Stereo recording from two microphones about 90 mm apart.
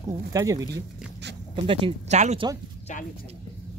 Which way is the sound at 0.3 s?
40° right (ahead or behind).